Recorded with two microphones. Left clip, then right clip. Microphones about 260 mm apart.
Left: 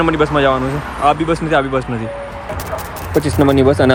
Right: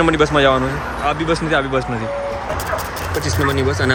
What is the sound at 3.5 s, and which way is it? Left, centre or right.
Speech, centre.